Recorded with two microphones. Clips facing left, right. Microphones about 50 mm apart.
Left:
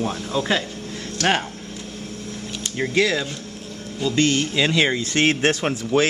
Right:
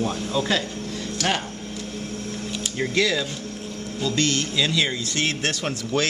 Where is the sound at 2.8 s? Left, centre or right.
Centre.